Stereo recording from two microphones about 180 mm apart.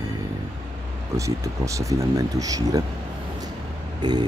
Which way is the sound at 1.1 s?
15° right (ahead or behind).